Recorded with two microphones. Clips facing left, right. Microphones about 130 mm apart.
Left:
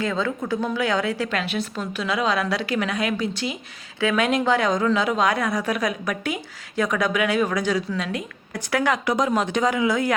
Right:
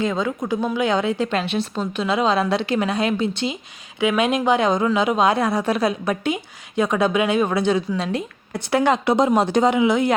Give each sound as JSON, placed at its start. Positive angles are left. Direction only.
{"t": 0.0, "sound": "a woman's voice", "side_deg": -20}
{"t": 9.7, "sound": "a woman's voice", "side_deg": -25}